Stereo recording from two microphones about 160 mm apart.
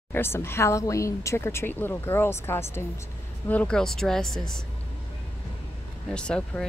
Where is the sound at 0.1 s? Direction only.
15° left (ahead or behind).